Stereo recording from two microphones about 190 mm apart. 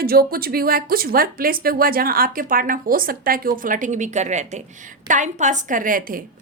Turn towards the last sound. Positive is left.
turn(degrees=-45)  # may be behind; listen again after turning